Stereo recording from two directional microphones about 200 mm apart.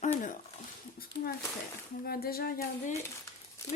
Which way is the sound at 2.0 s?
50° left (ahead or behind).